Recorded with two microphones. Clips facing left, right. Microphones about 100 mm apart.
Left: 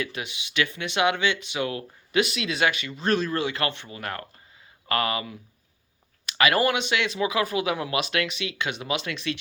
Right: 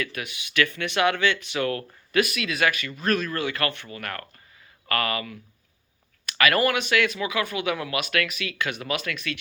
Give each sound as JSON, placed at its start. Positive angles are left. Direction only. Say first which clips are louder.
{"t": 0.0, "sound": "speech", "louder": "even", "side_deg": 25}